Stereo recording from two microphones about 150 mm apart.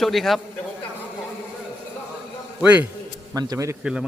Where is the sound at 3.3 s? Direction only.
25° right (ahead or behind).